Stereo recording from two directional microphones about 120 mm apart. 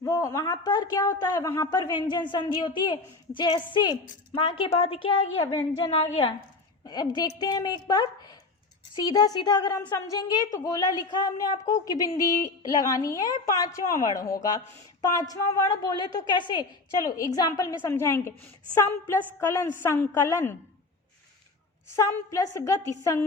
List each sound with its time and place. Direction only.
0.0 s a woman's voice: 25° left (ahead or behind); by 5.5 s 45° left (ahead or behind)
6.8 s a woman's voice: 35° left (ahead or behind)
17.0 s a woman's voice: 30° left (ahead or behind)
21.9 s a woman's voice: 25° left (ahead or behind)